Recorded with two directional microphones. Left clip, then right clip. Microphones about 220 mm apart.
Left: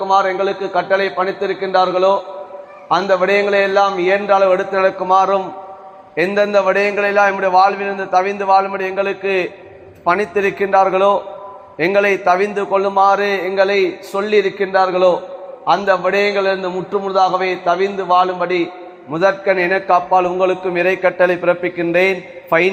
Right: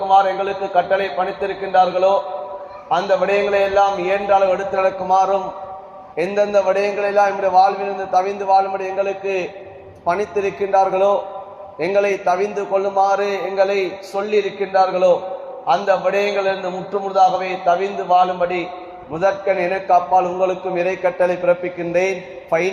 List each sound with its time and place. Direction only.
0.1 s a man's voice: 50° left (ahead or behind)